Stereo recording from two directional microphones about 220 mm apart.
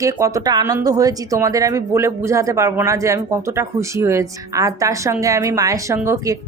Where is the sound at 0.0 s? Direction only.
15° right (ahead or behind).